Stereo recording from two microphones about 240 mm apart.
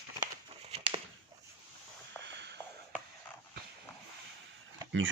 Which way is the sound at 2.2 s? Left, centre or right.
Right.